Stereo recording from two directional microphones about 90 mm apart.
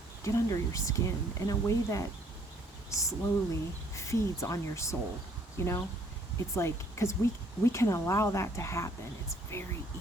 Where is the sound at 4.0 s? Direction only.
35° left (ahead or behind).